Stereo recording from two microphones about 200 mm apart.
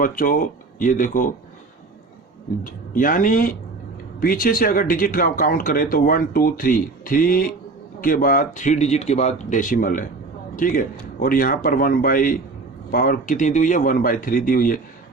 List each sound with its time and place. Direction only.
0.0 s speech: 45° left (ahead or behind)
2.6 s speech: 45° left (ahead or behind)